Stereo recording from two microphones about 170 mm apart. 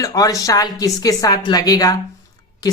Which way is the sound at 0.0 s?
20° left (ahead or behind).